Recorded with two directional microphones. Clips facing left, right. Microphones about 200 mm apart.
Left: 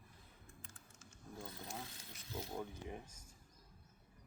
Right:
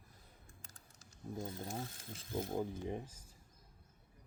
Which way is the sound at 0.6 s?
40° right (ahead or behind).